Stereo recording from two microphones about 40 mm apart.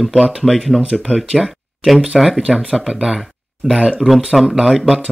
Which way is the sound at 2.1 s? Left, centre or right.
Centre.